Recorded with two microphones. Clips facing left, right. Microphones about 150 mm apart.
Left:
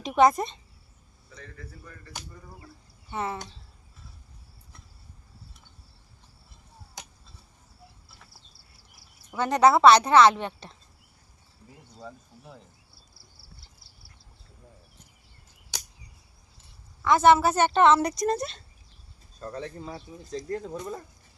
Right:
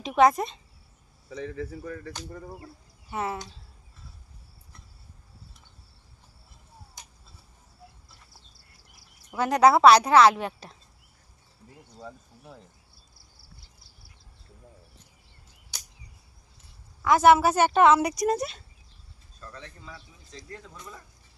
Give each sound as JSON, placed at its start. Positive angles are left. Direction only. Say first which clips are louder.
{"t": 0.0, "sound": "speech", "louder": "even", "side_deg": -5}
{"t": 1.3, "sound": "speech", "louder": "right 12 dB", "side_deg": -80}
{"t": 2.3, "sound": "speech", "louder": "right 8 dB", "side_deg": -55}
{"t": 3.1, "sound": "a woman's voice", "louder": "right 1 dB", "side_deg": -10}
{"t": 7.0, "sound": "chop", "louder": "left 8 dB", "side_deg": 75}
{"t": 9.3, "sound": "a woman's voice", "louder": "right 1 dB", "side_deg": -10}
{"t": 11.9, "sound": "speech", "louder": "even", "side_deg": 0}
{"t": 15.7, "sound": "a sound", "louder": "left 7 dB", "side_deg": 90}
{"t": 17.0, "sound": "a woman's voice", "louder": "right 1 dB", "side_deg": -10}
{"t": 19.4, "sound": "speech", "louder": "left 9 dB", "side_deg": 40}